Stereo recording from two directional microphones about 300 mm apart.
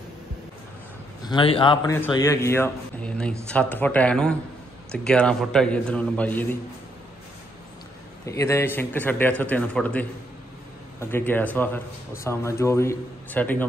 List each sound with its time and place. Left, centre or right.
1.2 s a man's voice: centre
8.3 s a man's voice: centre